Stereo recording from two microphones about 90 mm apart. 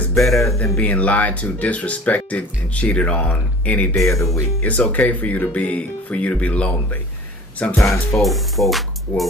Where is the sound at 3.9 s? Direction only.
30° left (ahead or behind).